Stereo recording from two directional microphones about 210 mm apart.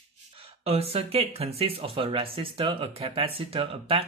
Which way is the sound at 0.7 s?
30° right (ahead or behind).